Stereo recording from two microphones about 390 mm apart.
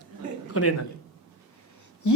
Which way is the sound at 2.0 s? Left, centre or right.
Left.